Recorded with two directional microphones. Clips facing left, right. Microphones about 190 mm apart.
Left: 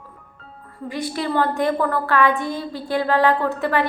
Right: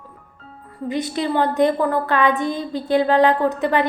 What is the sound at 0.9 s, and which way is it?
A woman's voice, 20° right (ahead or behind).